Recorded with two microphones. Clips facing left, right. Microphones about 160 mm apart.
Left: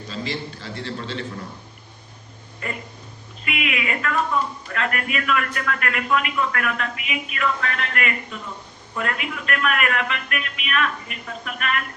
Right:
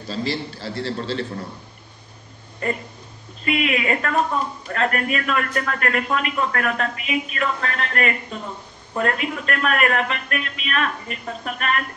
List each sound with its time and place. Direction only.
0.1 s a man's voice: 35° right (ahead or behind)
2.6 s a man's voice: 35° right (ahead or behind)